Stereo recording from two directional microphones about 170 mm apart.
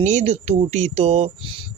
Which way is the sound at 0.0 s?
40° right (ahead or behind).